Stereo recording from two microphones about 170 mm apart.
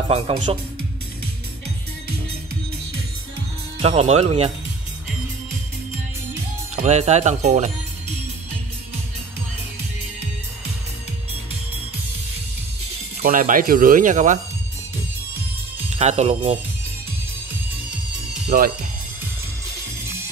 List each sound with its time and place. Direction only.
0.1 s speech: 35° right (ahead or behind)
3.8 s speech: 40° right (ahead or behind)
6.7 s speech: 40° right (ahead or behind)
13.2 s speech: 55° right (ahead or behind)
16.0 s speech: 40° right (ahead or behind)
18.5 s speech: 55° right (ahead or behind)